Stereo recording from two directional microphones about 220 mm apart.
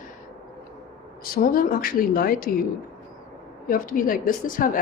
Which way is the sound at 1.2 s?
40° left (ahead or behind).